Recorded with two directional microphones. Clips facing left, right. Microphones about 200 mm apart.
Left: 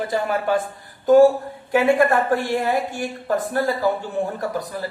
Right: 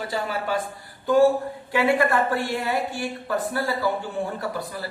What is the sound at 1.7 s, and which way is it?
Speech, 45° left (ahead or behind).